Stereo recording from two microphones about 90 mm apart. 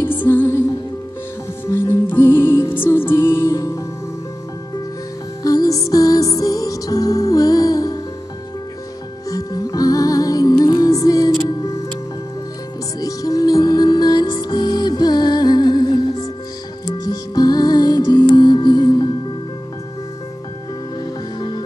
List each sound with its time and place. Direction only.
0.0 s music: 25° left (ahead or behind)
1.7 s music: 30° left (ahead or behind)
5.4 s music: 45° left (ahead or behind)
9.3 s music: 45° left (ahead or behind)
13.0 s music: 40° left (ahead or behind)
17.4 s music: 45° left (ahead or behind)
21.4 s music: 50° left (ahead or behind)